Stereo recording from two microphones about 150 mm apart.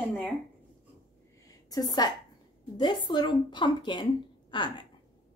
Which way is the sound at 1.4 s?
25° left (ahead or behind).